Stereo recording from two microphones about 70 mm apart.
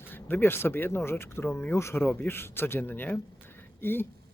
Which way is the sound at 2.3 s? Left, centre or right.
Left.